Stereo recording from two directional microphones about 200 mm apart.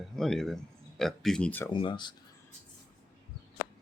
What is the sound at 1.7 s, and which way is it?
Speech, 25° left (ahead or behind).